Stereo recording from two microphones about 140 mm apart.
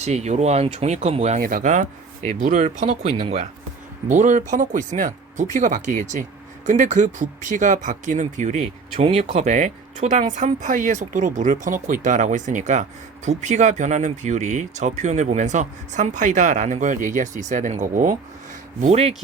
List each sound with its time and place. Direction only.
0.0 s speech: 55° right (ahead or behind)
1.4 s speech: 90° right; by 3.5 s 50° right (ahead or behind)
4.1 s speech: 65° right (ahead or behind)
9.0 s speech: 45° right (ahead or behind); by 18.1 s 65° right (ahead or behind)
18.8 s speech: 50° right (ahead or behind)